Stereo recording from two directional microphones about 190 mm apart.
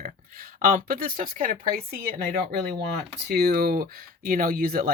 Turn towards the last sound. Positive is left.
turn(degrees=-50)  # may be behind; listen again after turning